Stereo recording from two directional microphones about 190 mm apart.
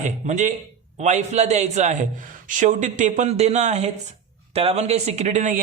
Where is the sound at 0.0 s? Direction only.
40° right (ahead or behind).